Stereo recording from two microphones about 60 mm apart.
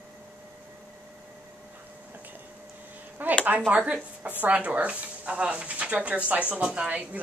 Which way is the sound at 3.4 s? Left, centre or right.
Right.